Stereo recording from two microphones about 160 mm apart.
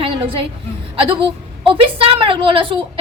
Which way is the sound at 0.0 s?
35° right (ahead or behind).